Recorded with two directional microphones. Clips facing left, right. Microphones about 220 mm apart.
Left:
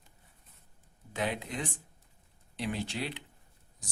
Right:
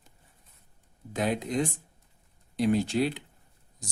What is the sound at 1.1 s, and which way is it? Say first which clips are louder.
Speech: right 7 dB; 40° right (ahead or behind).